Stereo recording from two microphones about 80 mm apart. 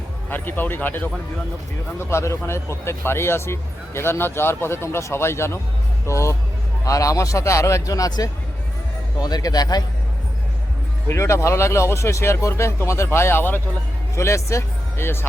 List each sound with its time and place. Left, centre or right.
0.3 s speech: left
2.0 s a man's voice: left
11.1 s speech: left